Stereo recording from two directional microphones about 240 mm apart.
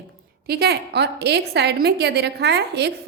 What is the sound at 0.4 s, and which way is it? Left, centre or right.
A woman's voice, right.